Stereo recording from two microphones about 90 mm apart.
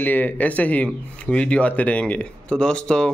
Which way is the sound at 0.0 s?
20° left (ahead or behind).